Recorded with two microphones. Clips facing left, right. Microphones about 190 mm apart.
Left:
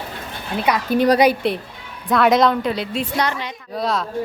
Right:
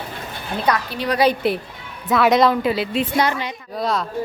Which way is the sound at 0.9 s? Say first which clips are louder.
Left 8 dB; 45° left (ahead or behind).